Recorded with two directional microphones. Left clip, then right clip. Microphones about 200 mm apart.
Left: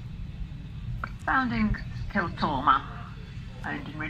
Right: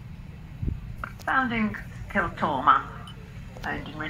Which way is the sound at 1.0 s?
20° right (ahead or behind).